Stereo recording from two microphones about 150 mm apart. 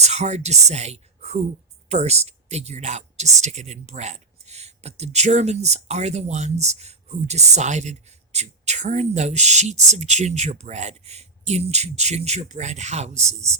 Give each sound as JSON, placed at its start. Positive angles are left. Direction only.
{"t": 0.0, "sound": "speech", "side_deg": -50}